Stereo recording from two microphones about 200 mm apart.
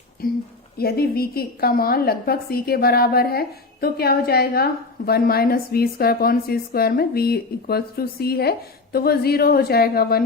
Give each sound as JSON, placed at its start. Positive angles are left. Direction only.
{"t": 0.2, "sound": "a woman's voice", "side_deg": 45}